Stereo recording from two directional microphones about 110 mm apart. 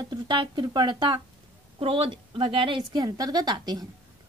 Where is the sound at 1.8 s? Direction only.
55° right (ahead or behind).